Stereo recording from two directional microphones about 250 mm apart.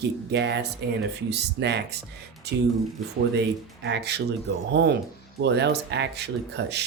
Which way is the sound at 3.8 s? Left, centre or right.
Right.